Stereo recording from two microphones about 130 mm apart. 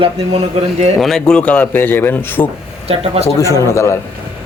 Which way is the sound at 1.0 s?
5° left (ahead or behind).